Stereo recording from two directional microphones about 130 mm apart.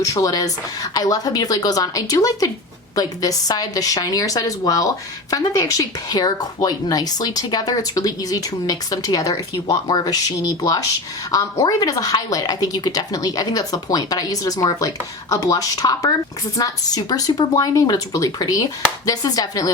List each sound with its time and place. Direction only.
0.0 s speech: 25° left (ahead or behind)